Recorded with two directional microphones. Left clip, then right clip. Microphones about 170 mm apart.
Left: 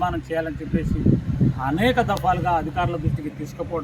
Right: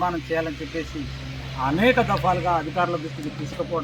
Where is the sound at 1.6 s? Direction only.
15° left (ahead or behind).